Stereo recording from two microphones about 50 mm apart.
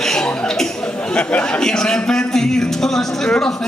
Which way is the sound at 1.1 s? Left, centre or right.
Left.